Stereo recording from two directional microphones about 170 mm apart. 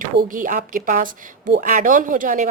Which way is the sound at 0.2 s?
50° right (ahead or behind).